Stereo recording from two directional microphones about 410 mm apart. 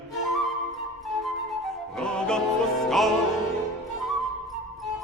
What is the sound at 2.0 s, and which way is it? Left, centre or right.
Music, centre.